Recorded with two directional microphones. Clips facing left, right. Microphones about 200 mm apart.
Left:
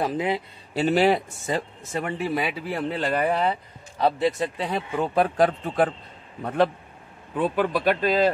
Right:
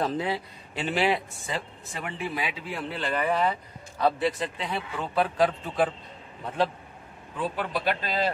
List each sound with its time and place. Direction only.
0.0 s speech: 15° left (ahead or behind)
0.7 s speech: 40° left (ahead or behind)